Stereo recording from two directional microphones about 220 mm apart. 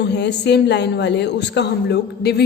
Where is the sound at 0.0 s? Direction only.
50° left (ahead or behind).